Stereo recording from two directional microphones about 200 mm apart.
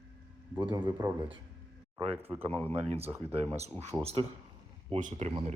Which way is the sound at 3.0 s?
10° right (ahead or behind).